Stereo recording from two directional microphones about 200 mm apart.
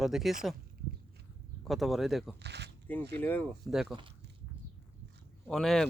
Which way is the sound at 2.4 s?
55° right (ahead or behind).